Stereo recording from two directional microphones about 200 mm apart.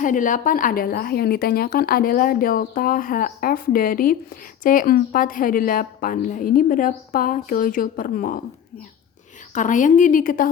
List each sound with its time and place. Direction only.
0.0 s a woman's voice: 40° left (ahead or behind)
9.6 s a woman's voice: 40° left (ahead or behind)